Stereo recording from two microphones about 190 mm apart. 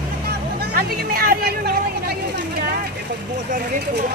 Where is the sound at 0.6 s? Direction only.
50° right (ahead or behind).